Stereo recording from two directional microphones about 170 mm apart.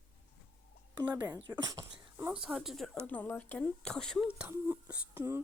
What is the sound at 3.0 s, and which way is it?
Speech, 10° left (ahead or behind).